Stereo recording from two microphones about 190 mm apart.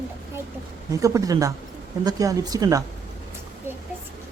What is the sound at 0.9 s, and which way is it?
Speech, 15° right (ahead or behind).